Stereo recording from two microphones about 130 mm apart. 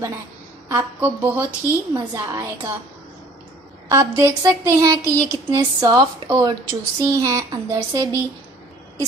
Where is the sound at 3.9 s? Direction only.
20° right (ahead or behind).